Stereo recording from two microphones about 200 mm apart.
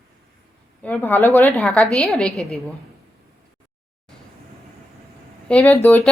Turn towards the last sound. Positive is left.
turn(degrees=10)  # may be behind; listen again after turning